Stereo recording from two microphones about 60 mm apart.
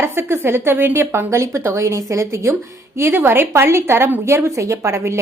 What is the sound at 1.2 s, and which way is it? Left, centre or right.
A woman's voice, right.